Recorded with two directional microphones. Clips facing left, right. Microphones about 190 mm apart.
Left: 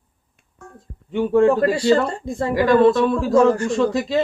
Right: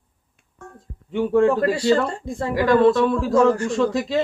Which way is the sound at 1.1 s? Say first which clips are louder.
Left 2 dB; 15° left (ahead or behind).